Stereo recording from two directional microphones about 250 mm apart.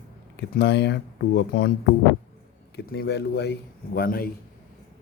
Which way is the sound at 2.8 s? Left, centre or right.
Left.